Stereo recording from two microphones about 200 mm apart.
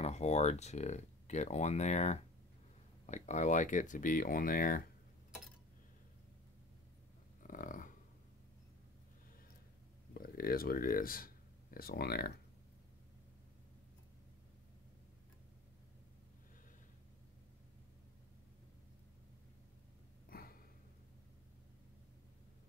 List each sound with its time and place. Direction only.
0.0 s speech: 35° left (ahead or behind)
7.4 s dog: 40° left (ahead or behind)
10.1 s speech: 45° left (ahead or behind)
20.2 s a sound: 50° left (ahead or behind)